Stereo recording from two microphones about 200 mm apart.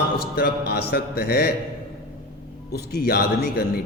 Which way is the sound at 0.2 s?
50° left (ahead or behind).